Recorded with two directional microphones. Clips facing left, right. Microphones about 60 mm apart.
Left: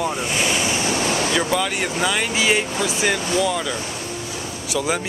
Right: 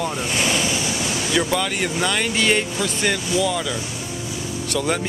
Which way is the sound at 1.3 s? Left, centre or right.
Centre.